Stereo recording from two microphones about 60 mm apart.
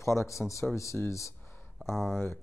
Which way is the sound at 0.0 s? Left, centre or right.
Left.